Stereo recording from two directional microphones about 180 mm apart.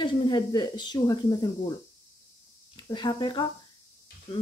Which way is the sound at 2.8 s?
25° left (ahead or behind).